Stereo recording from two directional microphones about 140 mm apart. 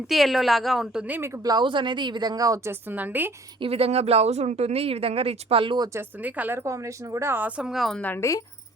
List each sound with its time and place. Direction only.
0.1 s a woman's voice: centre (ahead or behind)
3.6 s speech: 45° right (ahead or behind)
5.9 s a woman's voice: 15° right (ahead or behind)
8.0 s a woman's voice: 20° left (ahead or behind)